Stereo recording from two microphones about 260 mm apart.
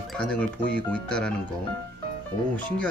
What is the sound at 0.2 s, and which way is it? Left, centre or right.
Speech, centre.